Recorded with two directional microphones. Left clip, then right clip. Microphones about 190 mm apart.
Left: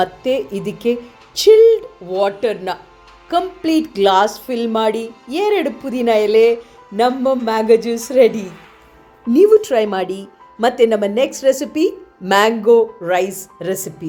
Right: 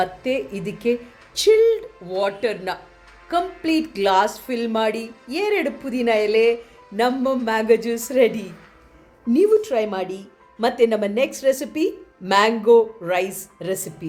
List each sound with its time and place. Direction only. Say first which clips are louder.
0.0 s speech: left 5 dB; 20° left (ahead or behind)